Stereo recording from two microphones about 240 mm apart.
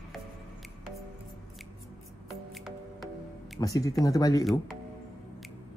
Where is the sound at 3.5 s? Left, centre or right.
Centre.